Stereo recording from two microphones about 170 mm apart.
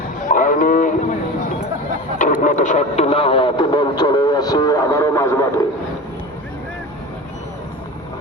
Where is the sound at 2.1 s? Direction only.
45° left (ahead or behind); by 5.6 s 15° left (ahead or behind).